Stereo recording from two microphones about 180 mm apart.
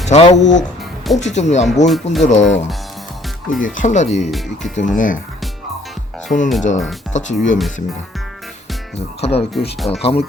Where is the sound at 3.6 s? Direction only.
45° left (ahead or behind).